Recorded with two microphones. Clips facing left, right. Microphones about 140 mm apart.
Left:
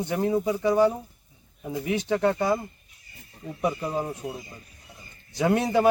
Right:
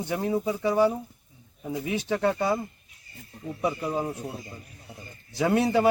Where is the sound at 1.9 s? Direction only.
15° left (ahead or behind).